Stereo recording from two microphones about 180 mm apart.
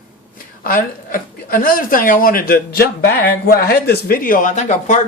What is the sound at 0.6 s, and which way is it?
Speech, 50° left (ahead or behind).